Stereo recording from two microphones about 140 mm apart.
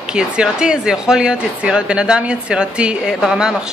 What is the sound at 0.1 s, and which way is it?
A woman's voice, 5° right (ahead or behind).